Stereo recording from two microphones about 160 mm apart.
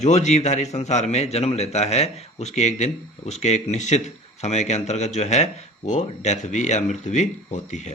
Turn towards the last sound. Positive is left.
turn(degrees=45)  # may be behind; listen again after turning